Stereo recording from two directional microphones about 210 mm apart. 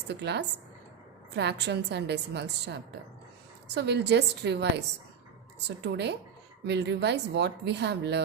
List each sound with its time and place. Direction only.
0.1 s a woman's voice: 55° right (ahead or behind)